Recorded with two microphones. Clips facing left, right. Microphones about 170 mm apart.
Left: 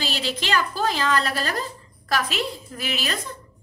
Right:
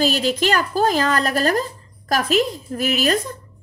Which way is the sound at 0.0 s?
45° right (ahead or behind).